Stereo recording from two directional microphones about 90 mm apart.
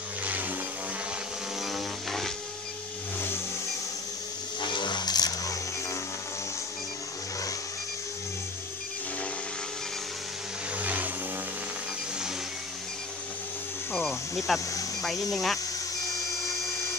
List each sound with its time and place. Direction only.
0.2 s vehicle: 20° right (ahead or behind)
1.6 s vehicle: centre (ahead or behind)
4.6 s a sound: 60° left (ahead or behind); by 5.9 s 40° left (ahead or behind)
10.8 s a sound: 15° right (ahead or behind)
13.9 s music: centre (ahead or behind)
15.3 s speech: 5° left (ahead or behind)